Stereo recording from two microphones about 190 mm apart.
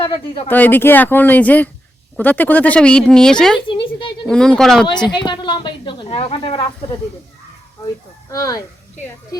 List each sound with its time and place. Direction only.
0.0 s a woman's voice: 25° left (ahead or behind)
0.4 s speech: 10° left (ahead or behind)
3.7 s a sound: 25° left (ahead or behind)
4.3 s speech: 5° left (ahead or behind)
4.9 s a woman's voice: 25° left (ahead or behind)
8.3 s speech: 20° left (ahead or behind)